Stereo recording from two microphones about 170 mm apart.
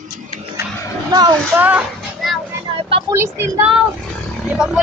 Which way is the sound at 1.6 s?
10° right (ahead or behind).